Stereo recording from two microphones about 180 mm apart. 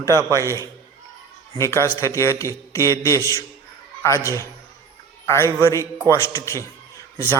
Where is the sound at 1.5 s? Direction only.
15° left (ahead or behind).